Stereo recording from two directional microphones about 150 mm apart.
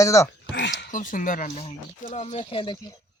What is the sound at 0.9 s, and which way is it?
Speech, 60° left (ahead or behind).